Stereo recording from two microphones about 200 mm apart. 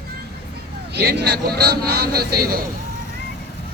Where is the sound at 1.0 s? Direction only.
55° right (ahead or behind).